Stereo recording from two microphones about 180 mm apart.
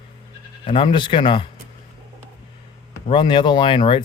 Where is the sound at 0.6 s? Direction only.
30° left (ahead or behind).